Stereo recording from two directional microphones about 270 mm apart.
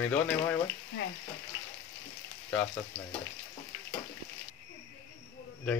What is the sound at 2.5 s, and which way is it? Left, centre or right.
Speech, centre.